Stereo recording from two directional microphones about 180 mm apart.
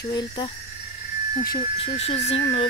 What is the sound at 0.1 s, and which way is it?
Speech, 20° left (ahead or behind).